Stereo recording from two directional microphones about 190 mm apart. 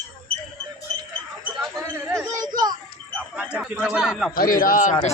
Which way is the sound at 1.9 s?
10° right (ahead or behind).